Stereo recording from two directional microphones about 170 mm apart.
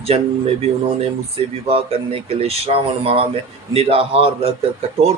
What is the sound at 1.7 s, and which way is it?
Speech, 35° right (ahead or behind).